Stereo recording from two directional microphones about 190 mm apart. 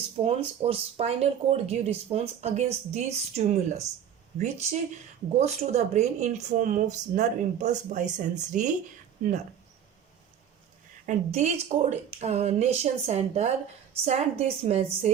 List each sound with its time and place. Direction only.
0.3 s speech: 30° right (ahead or behind)
11.0 s speech: 35° right (ahead or behind)